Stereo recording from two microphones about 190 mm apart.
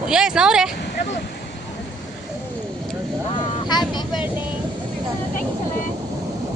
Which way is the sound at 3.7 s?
20° left (ahead or behind).